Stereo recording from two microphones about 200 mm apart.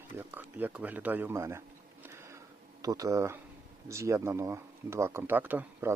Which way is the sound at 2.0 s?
15° right (ahead or behind).